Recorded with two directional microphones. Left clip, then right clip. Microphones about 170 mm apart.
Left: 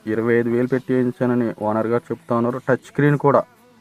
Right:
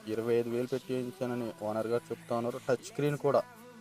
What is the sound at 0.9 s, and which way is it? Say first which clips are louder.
Speech: left 15 dB; 15° right (ahead or behind).